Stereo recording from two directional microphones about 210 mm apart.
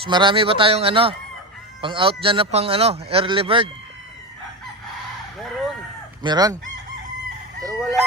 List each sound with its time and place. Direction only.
0.0 s speech: 20° right (ahead or behind)
6.2 s speech: 20° right (ahead or behind)
7.8 s crowing: centre (ahead or behind)